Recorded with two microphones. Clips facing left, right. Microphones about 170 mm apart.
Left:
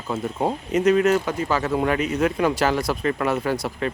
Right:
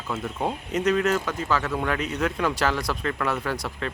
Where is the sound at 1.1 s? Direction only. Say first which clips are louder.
Left 4 dB; 20° left (ahead or behind).